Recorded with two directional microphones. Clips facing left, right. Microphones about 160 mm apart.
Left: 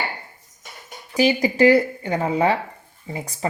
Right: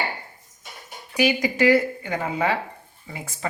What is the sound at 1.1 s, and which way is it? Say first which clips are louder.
Speech: left 3 dB; 35° left (ahead or behind).